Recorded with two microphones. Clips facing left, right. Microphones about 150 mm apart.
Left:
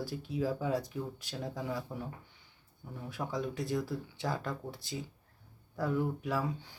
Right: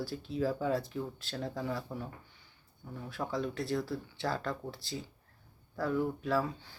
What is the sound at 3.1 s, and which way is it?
Speech, 15° left (ahead or behind).